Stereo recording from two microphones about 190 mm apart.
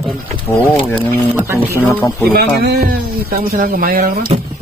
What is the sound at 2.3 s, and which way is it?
Speech, 55° right (ahead or behind).